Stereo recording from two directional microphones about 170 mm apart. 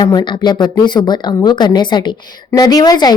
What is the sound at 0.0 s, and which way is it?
A woman's voice, 25° left (ahead or behind).